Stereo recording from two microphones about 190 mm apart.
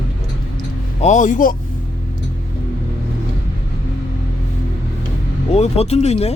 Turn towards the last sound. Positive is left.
turn(degrees=35)  # may be behind; listen again after turning